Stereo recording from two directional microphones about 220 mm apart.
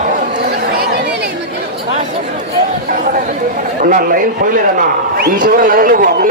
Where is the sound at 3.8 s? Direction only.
40° right (ahead or behind).